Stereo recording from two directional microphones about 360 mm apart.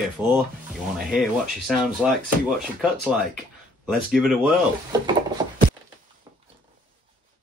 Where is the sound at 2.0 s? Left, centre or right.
Centre.